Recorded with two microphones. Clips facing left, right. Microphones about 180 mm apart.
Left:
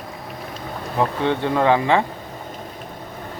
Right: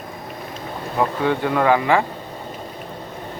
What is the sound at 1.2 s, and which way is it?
Speech, 25° left (ahead or behind).